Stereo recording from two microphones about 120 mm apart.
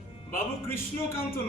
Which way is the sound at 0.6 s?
20° left (ahead or behind).